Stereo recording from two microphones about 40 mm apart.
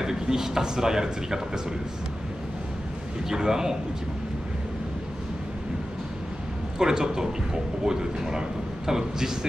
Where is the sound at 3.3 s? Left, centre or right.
Centre.